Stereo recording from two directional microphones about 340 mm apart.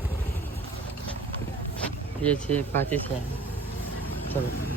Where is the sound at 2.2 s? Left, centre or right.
Centre.